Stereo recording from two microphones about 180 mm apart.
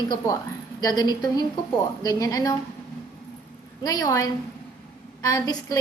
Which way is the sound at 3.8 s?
20° left (ahead or behind).